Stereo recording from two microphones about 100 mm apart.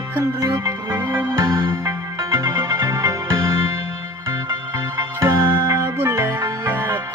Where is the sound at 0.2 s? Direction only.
35° right (ahead or behind).